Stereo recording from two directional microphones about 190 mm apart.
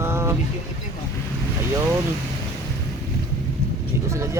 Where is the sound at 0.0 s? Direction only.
15° right (ahead or behind).